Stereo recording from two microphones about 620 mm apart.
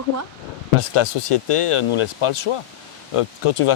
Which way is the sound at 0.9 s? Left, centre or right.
Left.